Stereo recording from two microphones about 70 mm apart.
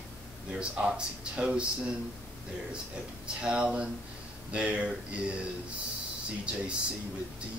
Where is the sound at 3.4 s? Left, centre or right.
Centre.